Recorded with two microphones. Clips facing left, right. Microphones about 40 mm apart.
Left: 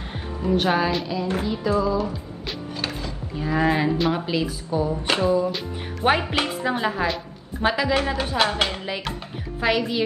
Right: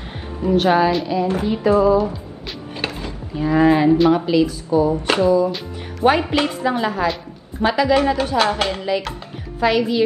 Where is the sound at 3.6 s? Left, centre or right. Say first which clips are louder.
Right 8 dB; centre.